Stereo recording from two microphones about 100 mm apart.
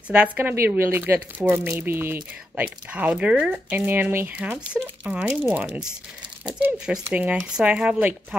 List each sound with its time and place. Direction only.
0.1 s speech: 15° right (ahead or behind)